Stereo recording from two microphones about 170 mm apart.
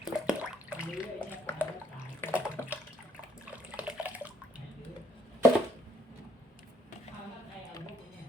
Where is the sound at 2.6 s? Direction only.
15° left (ahead or behind).